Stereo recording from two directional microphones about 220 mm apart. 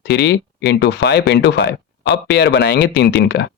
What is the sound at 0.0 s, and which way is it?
Speech, 50° left (ahead or behind).